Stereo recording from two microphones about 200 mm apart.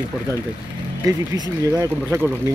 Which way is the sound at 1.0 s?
20° right (ahead or behind).